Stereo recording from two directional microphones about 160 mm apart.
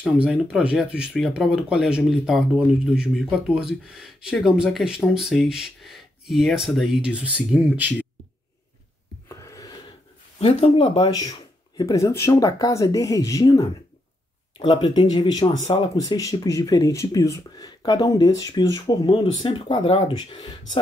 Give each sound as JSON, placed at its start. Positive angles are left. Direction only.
{"t": 0.0, "sound": "speech", "side_deg": -5}
{"t": 9.3, "sound": "a sound", "side_deg": 20}
{"t": 10.4, "sound": "speech", "side_deg": 35}
{"t": 14.6, "sound": "speech", "side_deg": 30}